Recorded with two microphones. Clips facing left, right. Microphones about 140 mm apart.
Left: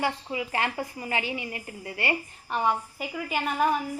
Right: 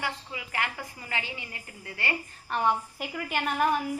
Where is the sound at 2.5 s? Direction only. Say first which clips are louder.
Even; 5° left (ahead or behind).